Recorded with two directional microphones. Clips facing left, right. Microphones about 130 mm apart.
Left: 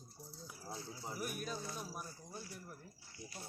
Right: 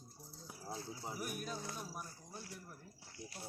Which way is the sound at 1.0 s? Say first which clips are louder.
Left 2 dB; 10° right (ahead or behind).